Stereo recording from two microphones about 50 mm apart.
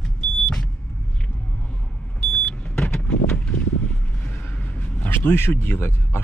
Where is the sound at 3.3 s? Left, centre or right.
Left.